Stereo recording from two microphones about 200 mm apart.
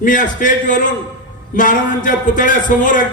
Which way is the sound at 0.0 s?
40° left (ahead or behind).